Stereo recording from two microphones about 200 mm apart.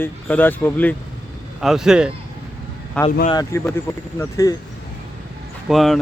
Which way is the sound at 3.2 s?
20° left (ahead or behind).